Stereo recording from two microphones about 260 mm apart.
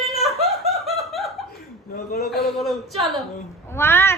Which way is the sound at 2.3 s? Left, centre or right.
Centre.